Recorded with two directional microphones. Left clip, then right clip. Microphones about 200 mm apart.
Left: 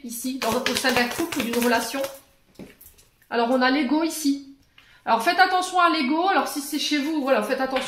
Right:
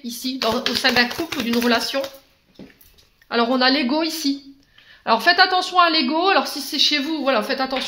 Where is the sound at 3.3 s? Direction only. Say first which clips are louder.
Right 3 dB; 45° right (ahead or behind).